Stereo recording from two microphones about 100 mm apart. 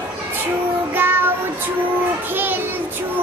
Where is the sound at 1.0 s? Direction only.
20° right (ahead or behind).